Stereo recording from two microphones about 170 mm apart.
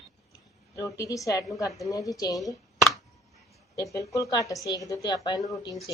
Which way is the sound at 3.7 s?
20° left (ahead or behind).